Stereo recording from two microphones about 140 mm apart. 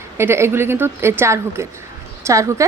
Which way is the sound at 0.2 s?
20° right (ahead or behind).